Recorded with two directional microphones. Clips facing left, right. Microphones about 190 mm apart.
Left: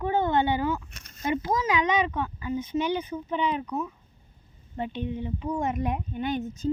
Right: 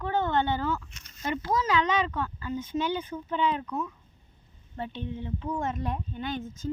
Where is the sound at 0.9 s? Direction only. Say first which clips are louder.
Left 3 dB; 55° left (ahead or behind).